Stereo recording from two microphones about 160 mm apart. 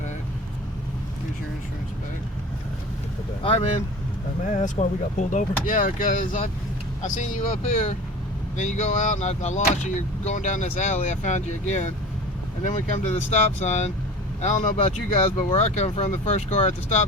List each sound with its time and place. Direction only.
3.4 s speech: 40° left (ahead or behind)
4.4 s speech: 50° left (ahead or behind)
8.5 s speech: 50° left (ahead or behind)